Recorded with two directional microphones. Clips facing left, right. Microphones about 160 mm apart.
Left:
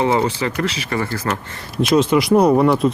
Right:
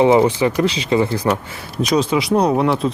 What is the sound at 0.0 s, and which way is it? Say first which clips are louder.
Speech: right 5 dB; 15° right (ahead or behind).